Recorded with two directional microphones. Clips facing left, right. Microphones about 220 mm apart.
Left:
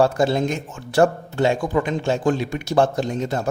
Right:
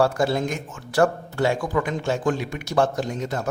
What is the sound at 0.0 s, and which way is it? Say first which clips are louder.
A man's voice: left 3 dB; 25° left (ahead or behind).